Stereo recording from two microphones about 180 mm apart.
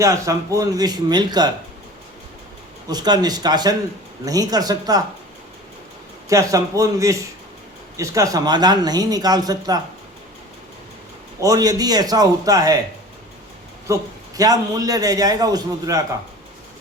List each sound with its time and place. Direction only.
0.0 s a man's voice: 15° right (ahead or behind)
2.9 s a man's voice: 20° right (ahead or behind)
6.2 s a man's voice: 20° right (ahead or behind)
11.3 s a man's voice: 20° right (ahead or behind)
13.8 s a man's voice: 20° right (ahead or behind)